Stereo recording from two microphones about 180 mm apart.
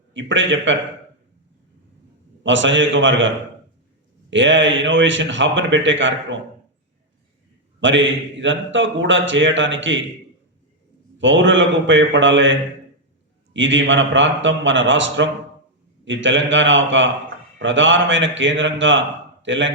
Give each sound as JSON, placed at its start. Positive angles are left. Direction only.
{"t": 0.1, "sound": "a man's voice", "side_deg": -90}
{"t": 2.4, "sound": "a man's voice", "side_deg": -90}
{"t": 7.8, "sound": "a man's voice", "side_deg": -90}
{"t": 11.2, "sound": "a man's voice", "side_deg": -90}